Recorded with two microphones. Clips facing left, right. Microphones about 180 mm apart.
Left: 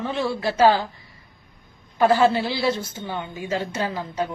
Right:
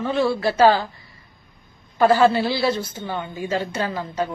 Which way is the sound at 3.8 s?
15° left (ahead or behind).